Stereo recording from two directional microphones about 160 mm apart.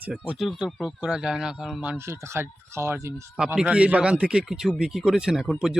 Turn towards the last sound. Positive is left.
turn(degrees=0)  # may be behind; listen again after turning